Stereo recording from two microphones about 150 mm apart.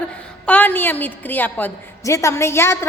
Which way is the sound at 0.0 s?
10° left (ahead or behind).